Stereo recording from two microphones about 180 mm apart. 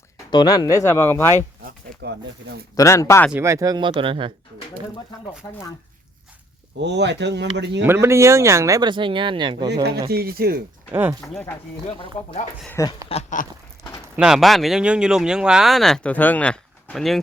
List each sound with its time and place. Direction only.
0.3 s speech: 25° left (ahead or behind)
1.6 s speech: 70° right (ahead or behind)
2.7 s speech: 20° left (ahead or behind)
3.3 s speech: 15° right (ahead or behind)
6.7 s speech: 70° right (ahead or behind)
7.9 s speech: 15° right (ahead or behind)
10.1 s speech: 60° right (ahead or behind)
10.9 s speech: 15° right (ahead or behind)
11.9 s speech: 35° left (ahead or behind)
12.6 s speech: 15° left (ahead or behind)
13.1 s speech: 35° left (ahead or behind)
14.2 s speech: 5° right (ahead or behind)